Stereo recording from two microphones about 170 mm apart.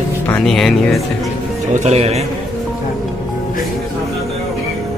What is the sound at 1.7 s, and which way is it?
Speech, 40° right (ahead or behind).